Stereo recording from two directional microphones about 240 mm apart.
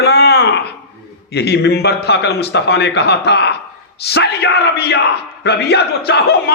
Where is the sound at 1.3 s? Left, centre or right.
Left.